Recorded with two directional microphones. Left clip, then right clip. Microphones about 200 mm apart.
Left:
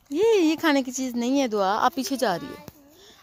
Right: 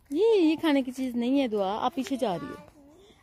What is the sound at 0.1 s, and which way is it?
Speech, 10° left (ahead or behind).